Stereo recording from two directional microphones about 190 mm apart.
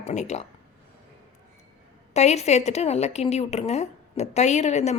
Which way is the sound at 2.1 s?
35° left (ahead or behind).